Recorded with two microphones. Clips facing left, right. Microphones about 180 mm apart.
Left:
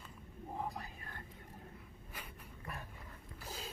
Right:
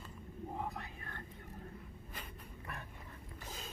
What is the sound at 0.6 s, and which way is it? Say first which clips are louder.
Whispering: left 3 dB; 10° left (ahead or behind).